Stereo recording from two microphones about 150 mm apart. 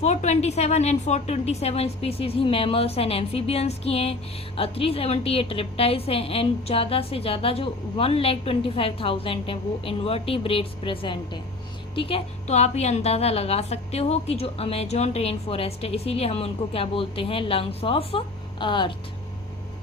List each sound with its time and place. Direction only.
0.0 s a woman's voice: 50° left (ahead or behind); by 18.9 s 30° left (ahead or behind)